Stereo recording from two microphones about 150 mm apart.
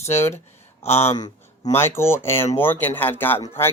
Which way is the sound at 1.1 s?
25° left (ahead or behind).